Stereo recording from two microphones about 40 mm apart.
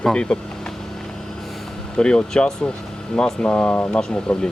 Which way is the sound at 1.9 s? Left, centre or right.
Left.